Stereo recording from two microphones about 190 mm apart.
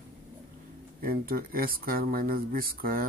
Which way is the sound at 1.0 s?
50° right (ahead or behind).